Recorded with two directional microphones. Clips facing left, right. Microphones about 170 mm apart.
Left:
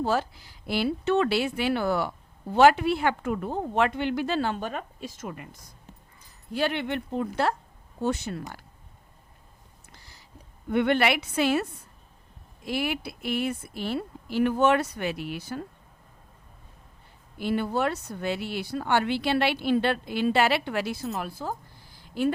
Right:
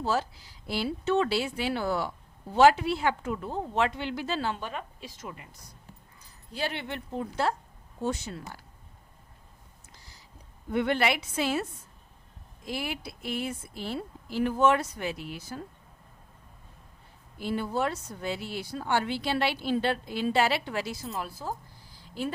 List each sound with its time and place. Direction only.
0.0 s speech: 55° left (ahead or behind)
6.5 s speech: 60° left (ahead or behind)
9.9 s a sound: 60° left (ahead or behind)
10.7 s speech: 65° left (ahead or behind)
17.3 s speech: 70° left (ahead or behind)